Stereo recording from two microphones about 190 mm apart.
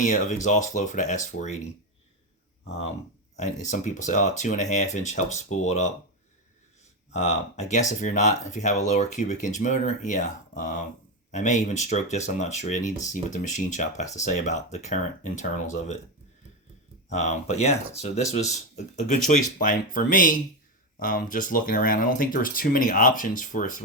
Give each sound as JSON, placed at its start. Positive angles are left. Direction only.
{"t": 0.0, "sound": "speech", "side_deg": 40}
{"t": 3.3, "sound": "speech", "side_deg": 40}
{"t": 7.1, "sound": "speech", "side_deg": 35}
{"t": 17.1, "sound": "speech", "side_deg": 35}